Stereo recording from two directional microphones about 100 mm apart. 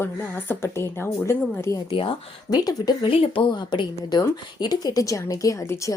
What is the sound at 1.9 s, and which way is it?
Speech, 60° left (ahead or behind).